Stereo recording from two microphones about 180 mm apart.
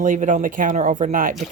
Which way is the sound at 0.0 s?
45° right (ahead or behind).